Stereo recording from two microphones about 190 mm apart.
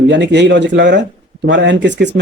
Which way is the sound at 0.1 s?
65° right (ahead or behind).